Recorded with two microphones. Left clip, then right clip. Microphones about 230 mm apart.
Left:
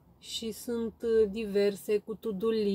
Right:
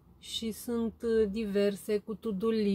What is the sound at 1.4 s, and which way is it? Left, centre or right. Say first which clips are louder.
Speech: left 2 dB; centre.